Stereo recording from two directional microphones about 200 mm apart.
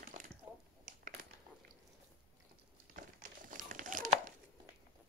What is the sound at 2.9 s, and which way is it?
Crumpling, 40° right (ahead or behind).